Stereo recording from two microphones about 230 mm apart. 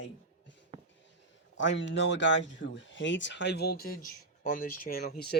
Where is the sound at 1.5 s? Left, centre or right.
Left.